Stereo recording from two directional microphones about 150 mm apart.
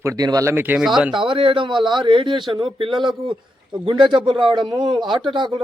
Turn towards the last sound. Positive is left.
turn(degrees=-30)  # may be behind; listen again after turning